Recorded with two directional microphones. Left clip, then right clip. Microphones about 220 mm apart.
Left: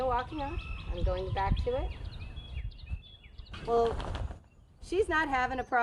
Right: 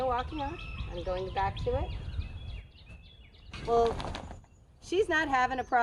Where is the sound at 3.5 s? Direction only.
45° right (ahead or behind).